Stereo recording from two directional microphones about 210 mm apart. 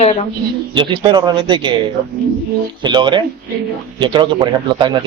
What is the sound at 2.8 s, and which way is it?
Speech, 20° right (ahead or behind).